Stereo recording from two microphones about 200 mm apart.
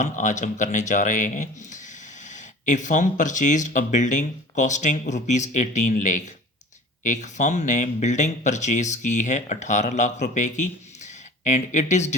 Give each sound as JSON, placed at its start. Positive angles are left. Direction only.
{"t": 0.0, "sound": "speech", "side_deg": 35}